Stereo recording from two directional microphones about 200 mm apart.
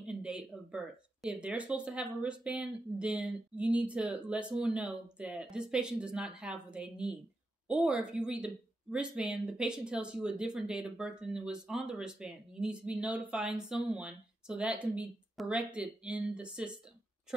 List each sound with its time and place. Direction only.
0.0 s speech: 5° right (ahead or behind)